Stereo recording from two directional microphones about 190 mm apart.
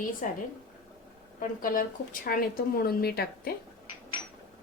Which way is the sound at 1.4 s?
45° left (ahead or behind).